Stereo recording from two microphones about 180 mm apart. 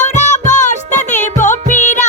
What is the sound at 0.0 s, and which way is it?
Music, 40° left (ahead or behind).